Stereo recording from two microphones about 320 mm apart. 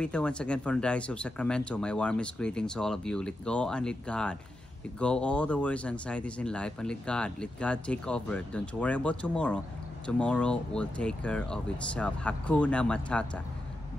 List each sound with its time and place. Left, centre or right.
0.0 s speech: centre